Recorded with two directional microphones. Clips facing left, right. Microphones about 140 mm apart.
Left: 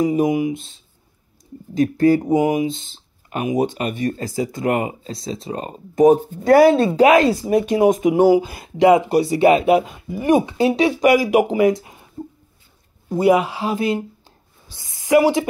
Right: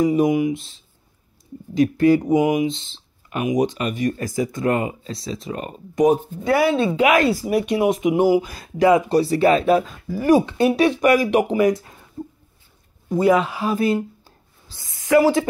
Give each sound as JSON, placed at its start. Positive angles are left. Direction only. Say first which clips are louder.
{"t": 0.2, "sound": "speech", "louder": "even", "side_deg": 30}
{"t": 1.8, "sound": "speech", "louder": "even", "side_deg": 40}
{"t": 6.4, "sound": "speech", "louder": "left 7 dB", "side_deg": 40}
{"t": 13.2, "sound": "a woman's voice", "louder": "left 2 dB", "side_deg": 20}